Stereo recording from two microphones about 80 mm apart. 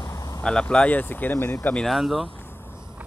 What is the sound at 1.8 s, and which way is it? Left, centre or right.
Speech, centre.